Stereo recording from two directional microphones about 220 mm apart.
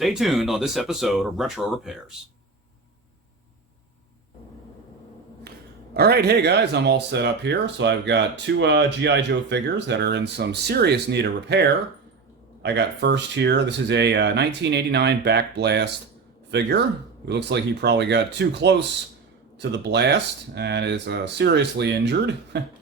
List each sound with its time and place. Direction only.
0.0 s speech: centre (ahead or behind)
5.4 s speech: 45° right (ahead or behind)